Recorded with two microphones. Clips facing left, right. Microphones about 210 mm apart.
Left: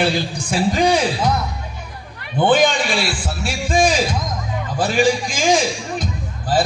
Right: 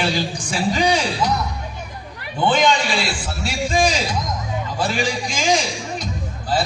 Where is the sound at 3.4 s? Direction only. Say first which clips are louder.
Left 2 dB; 50° left (ahead or behind).